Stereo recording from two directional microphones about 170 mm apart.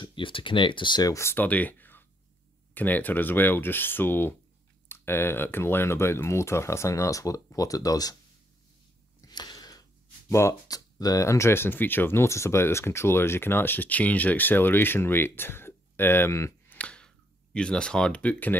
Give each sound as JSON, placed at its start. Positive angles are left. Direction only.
{"t": 0.0, "sound": "speech", "side_deg": 30}
{"t": 9.2, "sound": "a sound", "side_deg": 25}
{"t": 10.3, "sound": "speech", "side_deg": 20}